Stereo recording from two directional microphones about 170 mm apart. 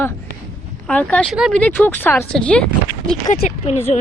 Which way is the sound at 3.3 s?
45° left (ahead or behind).